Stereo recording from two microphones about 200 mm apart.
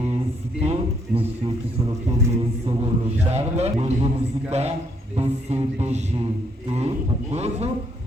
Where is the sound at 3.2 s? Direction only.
35° right (ahead or behind).